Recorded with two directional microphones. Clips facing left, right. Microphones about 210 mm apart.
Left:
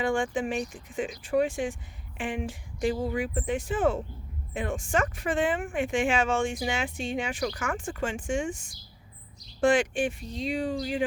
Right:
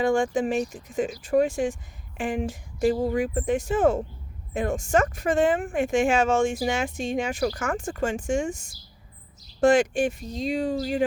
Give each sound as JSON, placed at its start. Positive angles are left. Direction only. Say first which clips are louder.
{"t": 0.0, "sound": "speech", "louder": "right 5 dB", "side_deg": -40}